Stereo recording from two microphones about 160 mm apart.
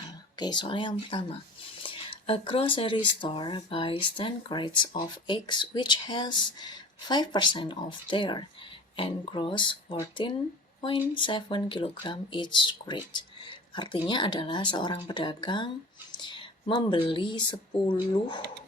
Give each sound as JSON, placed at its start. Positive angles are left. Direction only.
{"t": 0.3, "sound": "speech", "side_deg": 25}
{"t": 10.8, "sound": "a sound", "side_deg": 30}
{"t": 11.2, "sound": "speech", "side_deg": 30}